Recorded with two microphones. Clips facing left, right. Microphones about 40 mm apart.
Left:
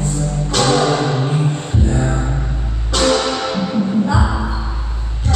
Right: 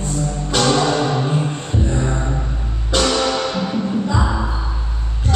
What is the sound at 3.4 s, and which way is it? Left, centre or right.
Music, centre.